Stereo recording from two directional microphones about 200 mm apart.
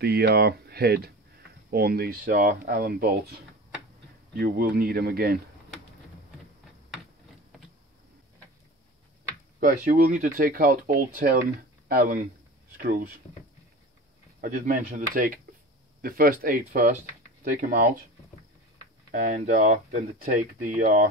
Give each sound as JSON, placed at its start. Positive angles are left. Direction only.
{"t": 0.0, "sound": "speech", "side_deg": -50}
{"t": 9.6, "sound": "speech", "side_deg": -45}
{"t": 14.4, "sound": "speech", "side_deg": -40}
{"t": 19.1, "sound": "speech", "side_deg": -40}